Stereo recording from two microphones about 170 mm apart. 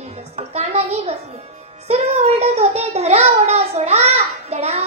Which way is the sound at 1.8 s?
35° right (ahead or behind).